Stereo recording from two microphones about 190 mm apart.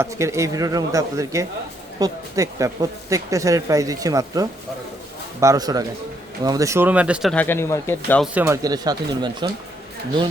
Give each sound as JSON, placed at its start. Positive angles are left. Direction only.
{"t": 0.0, "sound": "speech", "side_deg": -15}
{"t": 8.2, "sound": "speech", "side_deg": -10}
{"t": 8.6, "sound": "speech", "side_deg": -20}